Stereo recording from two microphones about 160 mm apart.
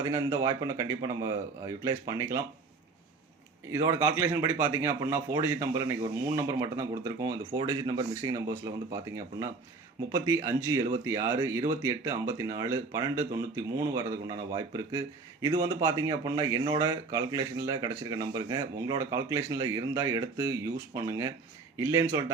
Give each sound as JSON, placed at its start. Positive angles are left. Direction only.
{"t": 0.0, "sound": "speech", "side_deg": -20}
{"t": 3.7, "sound": "speech", "side_deg": -20}